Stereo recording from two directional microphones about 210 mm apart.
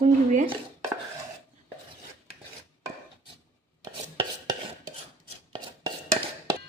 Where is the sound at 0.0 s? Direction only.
30° right (ahead or behind).